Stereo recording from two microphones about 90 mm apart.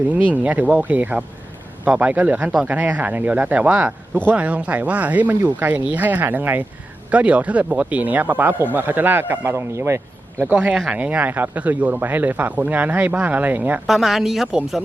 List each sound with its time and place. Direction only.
0.3 s a man's voice: 15° right (ahead or behind)
10.4 s speech: 15° right (ahead or behind)
13.8 s speech: centre (ahead or behind)